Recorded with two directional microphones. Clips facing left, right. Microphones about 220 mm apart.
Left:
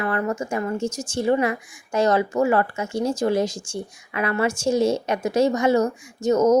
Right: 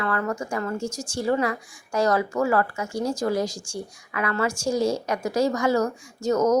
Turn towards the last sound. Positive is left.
turn(degrees=20)  # may be behind; listen again after turning